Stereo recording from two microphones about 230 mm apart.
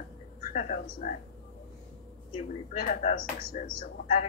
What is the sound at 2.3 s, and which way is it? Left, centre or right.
Speech, left.